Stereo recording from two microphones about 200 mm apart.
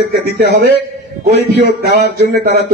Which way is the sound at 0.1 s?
55° right (ahead or behind).